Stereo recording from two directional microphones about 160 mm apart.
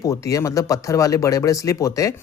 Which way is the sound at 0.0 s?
20° left (ahead or behind).